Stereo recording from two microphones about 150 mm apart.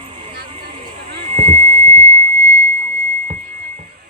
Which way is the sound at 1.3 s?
45° right (ahead or behind).